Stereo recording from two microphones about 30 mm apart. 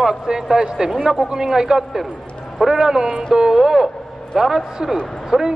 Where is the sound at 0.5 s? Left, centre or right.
Centre.